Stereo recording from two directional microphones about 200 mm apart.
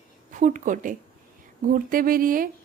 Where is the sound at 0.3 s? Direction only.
40° right (ahead or behind).